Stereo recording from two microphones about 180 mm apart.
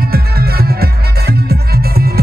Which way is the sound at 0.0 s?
60° right (ahead or behind).